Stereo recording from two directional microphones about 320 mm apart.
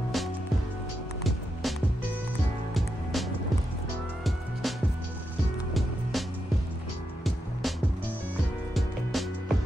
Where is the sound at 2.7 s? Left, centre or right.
Centre.